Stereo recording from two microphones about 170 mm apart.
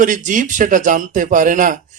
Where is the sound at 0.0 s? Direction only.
50° right (ahead or behind).